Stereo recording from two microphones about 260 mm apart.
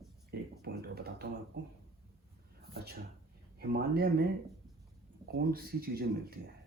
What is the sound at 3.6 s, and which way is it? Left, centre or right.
Speech, right.